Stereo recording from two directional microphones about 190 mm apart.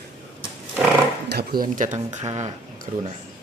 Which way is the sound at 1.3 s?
55° right (ahead or behind).